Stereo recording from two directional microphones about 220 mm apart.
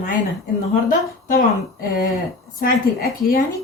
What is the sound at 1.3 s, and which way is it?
Speech, 40° left (ahead or behind).